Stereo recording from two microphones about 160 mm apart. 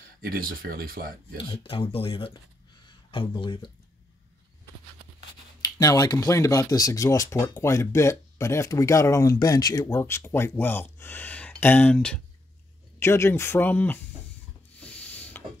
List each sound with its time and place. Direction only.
0.2 s speech: 65° right (ahead or behind)
1.4 s speech: 35° left (ahead or behind)
5.6 s speech: 25° left (ahead or behind)
14.8 s rub: 10° left (ahead or behind)